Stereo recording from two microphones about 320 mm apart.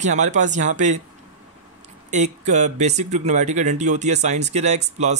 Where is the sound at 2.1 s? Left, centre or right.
Right.